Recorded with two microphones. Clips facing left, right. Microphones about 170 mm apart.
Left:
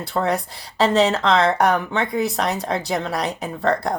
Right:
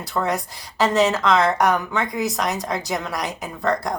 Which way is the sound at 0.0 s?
30° left (ahead or behind).